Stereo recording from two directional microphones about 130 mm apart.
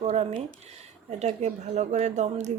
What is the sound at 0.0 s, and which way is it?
Speech, 55° right (ahead or behind).